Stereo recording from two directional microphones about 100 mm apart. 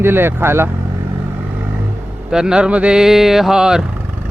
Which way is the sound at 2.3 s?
5° right (ahead or behind).